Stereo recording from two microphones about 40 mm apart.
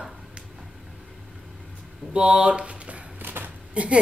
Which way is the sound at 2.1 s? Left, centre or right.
Right.